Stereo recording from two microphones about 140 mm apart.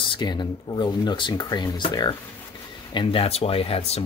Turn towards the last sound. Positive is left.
turn(degrees=45)  # may be behind; listen again after turning